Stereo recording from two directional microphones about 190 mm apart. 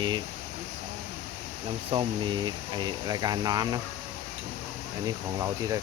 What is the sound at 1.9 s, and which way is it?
Speech, 25° right (ahead or behind).